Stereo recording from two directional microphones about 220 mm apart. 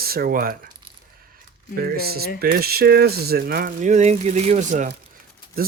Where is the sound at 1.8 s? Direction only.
45° right (ahead or behind).